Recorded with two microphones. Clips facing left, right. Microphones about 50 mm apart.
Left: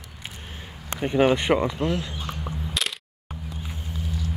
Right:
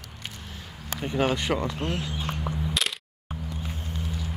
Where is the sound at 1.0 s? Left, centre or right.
Left.